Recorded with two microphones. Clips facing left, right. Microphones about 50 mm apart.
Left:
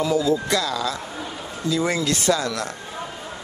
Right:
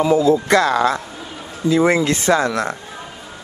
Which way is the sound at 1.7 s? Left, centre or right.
Right.